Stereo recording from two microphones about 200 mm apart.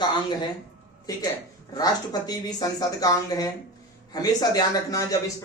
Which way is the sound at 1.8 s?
20° left (ahead or behind).